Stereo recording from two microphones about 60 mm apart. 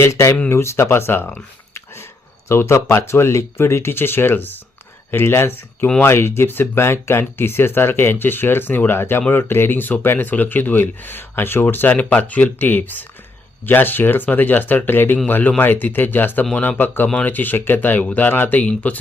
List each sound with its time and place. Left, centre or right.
0.0 s speech: left
2.5 s speech: left
18.6 s speech: left